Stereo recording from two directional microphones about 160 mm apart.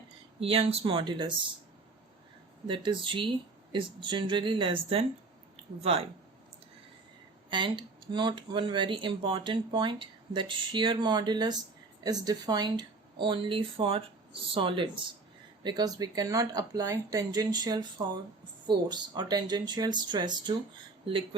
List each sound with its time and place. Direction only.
0.3 s speech: 35° right (ahead or behind)
2.6 s speech: 30° right (ahead or behind)
5.6 s a sound: 40° right (ahead or behind)
7.5 s speech: 30° right (ahead or behind)